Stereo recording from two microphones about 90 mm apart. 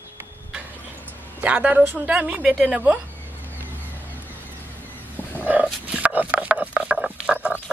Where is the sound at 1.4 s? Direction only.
15° right (ahead or behind).